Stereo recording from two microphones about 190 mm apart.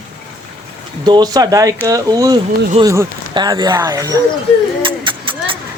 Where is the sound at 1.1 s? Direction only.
20° right (ahead or behind).